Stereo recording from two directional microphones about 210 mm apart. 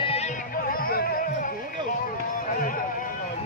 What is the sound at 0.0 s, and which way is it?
Music, 30° left (ahead or behind).